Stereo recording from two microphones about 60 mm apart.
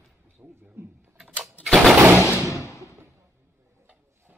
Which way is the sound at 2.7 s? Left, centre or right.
Left.